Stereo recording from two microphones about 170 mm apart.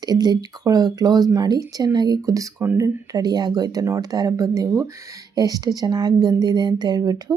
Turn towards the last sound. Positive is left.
turn(degrees=-20)  # may be behind; listen again after turning